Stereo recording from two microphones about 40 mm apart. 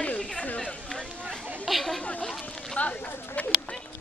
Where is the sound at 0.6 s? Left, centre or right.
Left.